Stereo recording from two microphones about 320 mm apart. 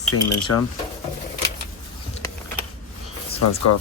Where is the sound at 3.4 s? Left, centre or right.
Left.